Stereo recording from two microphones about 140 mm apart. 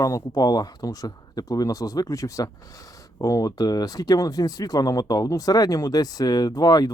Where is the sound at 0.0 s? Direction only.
25° left (ahead or behind).